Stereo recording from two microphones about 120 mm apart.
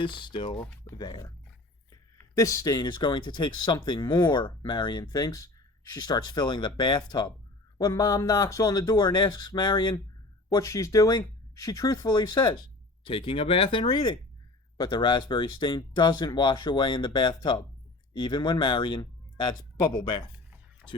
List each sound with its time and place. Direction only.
0.0 s speech: 40° left (ahead or behind)
10.5 s speech: 25° left (ahead or behind)